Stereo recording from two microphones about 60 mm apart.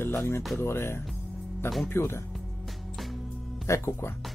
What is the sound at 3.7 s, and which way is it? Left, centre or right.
Speech, left.